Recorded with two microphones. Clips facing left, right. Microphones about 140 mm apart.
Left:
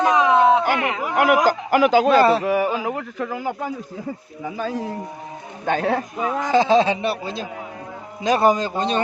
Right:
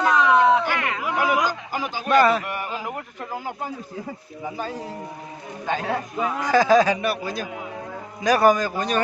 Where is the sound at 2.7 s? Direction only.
90° left.